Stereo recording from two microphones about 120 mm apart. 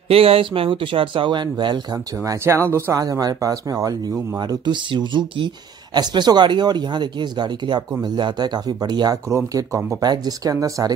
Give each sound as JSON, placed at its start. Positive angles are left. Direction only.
{"t": 0.1, "sound": "speech", "side_deg": -50}
{"t": 2.2, "sound": "speech", "side_deg": -25}